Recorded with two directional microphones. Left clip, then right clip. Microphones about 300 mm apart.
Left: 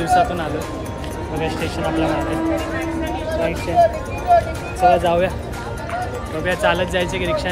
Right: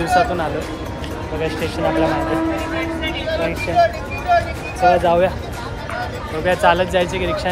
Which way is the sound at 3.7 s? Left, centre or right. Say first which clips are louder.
Left 1 dB; left.